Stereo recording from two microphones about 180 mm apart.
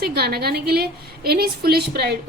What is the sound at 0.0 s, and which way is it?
A woman's voice, 60° right (ahead or behind).